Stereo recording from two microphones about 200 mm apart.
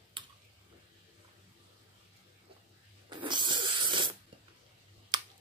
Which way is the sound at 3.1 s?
25° right (ahead or behind).